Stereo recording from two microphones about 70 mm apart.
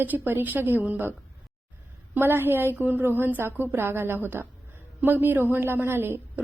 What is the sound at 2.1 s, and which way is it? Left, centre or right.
A woman's voice, right.